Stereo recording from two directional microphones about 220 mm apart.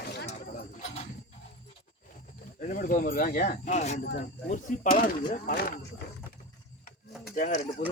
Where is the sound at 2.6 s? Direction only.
35° left (ahead or behind).